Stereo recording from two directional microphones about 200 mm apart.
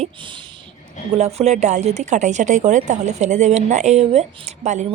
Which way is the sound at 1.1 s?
35° right (ahead or behind).